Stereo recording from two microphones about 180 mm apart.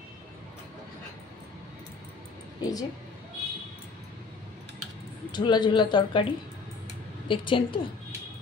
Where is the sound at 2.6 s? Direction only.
20° left (ahead or behind).